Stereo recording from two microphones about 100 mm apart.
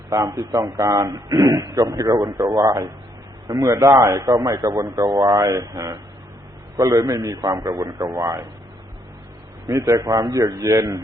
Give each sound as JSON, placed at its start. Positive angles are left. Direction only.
{"t": 0.1, "sound": "a man's voice", "side_deg": -35}
{"t": 9.6, "sound": "a man's voice", "side_deg": -30}